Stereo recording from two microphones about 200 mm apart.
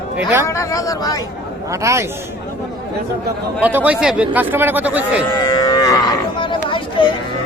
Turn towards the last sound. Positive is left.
turn(degrees=25)  # may be behind; listen again after turning